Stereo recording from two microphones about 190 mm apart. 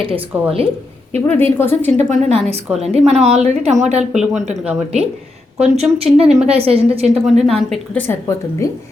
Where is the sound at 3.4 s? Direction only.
35° right (ahead or behind).